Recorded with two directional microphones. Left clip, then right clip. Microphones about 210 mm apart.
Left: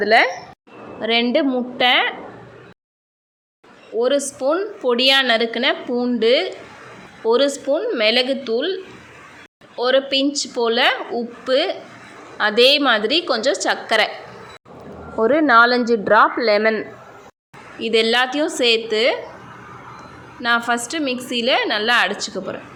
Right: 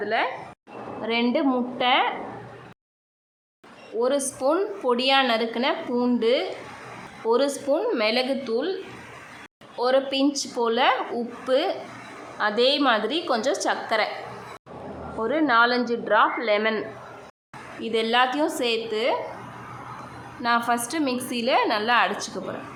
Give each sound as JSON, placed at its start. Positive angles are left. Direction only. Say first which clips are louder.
{"t": 0.0, "sound": "a woman's voice", "louder": "left 10 dB", "side_deg": 25}
{"t": 3.9, "sound": "a woman's voice", "louder": "left 5 dB", "side_deg": 10}
{"t": 15.2, "sound": "speech", "louder": "left 7 dB", "side_deg": 25}
{"t": 17.7, "sound": "a woman's voice", "louder": "left 5 dB", "side_deg": 15}
{"t": 20.4, "sound": "a woman's voice", "louder": "left 4 dB", "side_deg": 10}